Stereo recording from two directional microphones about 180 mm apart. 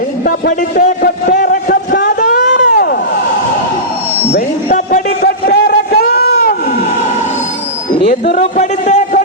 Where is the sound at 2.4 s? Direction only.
70° left (ahead or behind).